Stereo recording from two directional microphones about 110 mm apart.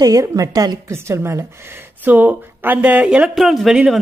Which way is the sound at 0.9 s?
25° right (ahead or behind).